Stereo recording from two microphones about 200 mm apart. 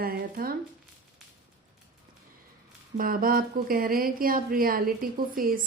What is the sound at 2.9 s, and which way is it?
A woman's voice, 45° right (ahead or behind).